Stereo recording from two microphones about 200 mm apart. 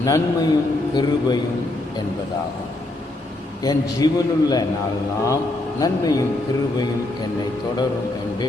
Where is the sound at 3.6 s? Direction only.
20° left (ahead or behind).